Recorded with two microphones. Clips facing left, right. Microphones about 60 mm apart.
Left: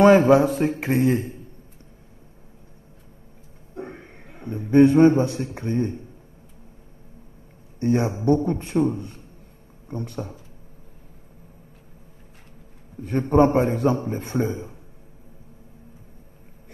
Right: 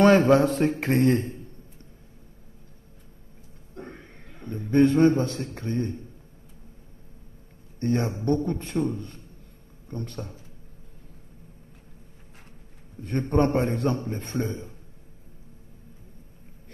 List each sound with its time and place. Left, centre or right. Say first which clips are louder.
0.0 s a man's voice: left 3 dB; centre
3.7 s a man's voice: left 5 dB; centre
7.8 s a man's voice: left 4 dB; centre
12.9 s a man's voice: left 5 dB; centre